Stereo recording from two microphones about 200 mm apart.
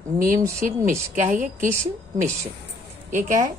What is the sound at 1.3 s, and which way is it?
Speech, 40° right (ahead or behind).